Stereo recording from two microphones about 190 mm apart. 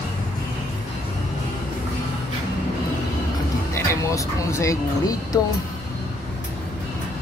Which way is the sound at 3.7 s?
15° left (ahead or behind).